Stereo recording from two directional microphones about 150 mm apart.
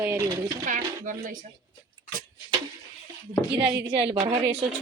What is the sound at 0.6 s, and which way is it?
Speech, 60° right (ahead or behind).